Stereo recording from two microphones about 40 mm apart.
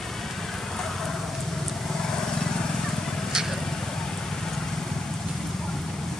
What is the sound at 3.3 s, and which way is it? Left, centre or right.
Vehicle, centre.